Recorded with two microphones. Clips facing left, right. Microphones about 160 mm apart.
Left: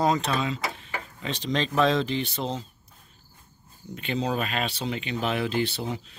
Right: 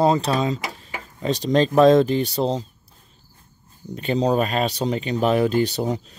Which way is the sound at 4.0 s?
35° right (ahead or behind).